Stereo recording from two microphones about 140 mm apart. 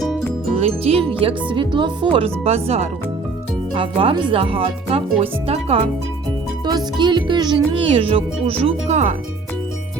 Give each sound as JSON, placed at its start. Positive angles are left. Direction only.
{"t": 0.6, "sound": "music", "side_deg": -45}
{"t": 1.2, "sound": "speech", "side_deg": -35}
{"t": 6.7, "sound": "speech", "side_deg": -30}